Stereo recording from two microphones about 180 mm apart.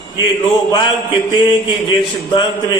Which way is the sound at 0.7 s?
25° left (ahead or behind).